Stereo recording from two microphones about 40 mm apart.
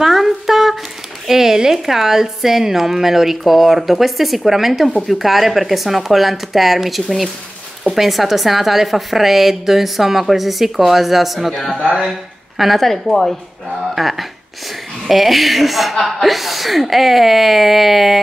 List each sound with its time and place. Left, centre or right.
0.0 s a sound: centre
1.2 s a woman's voice: centre
11.7 s speech: right
12.0 s a woman's voice: centre
13.9 s a woman's voice: centre